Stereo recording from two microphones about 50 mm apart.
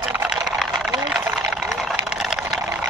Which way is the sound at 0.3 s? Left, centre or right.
Centre.